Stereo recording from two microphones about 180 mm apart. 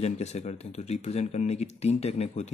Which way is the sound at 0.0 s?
40° left (ahead or behind).